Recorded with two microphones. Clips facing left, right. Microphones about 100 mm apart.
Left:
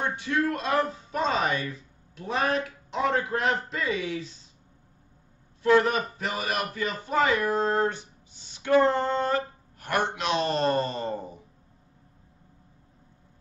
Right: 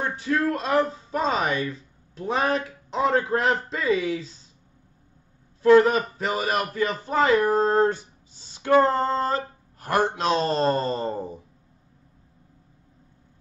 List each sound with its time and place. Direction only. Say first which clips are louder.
0.1 s a man's voice: right 3 dB; 35° right (ahead or behind)
5.6 s a man's voice: right 5 dB; 35° right (ahead or behind)